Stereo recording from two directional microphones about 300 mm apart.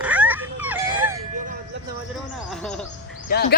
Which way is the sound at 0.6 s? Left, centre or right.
Centre.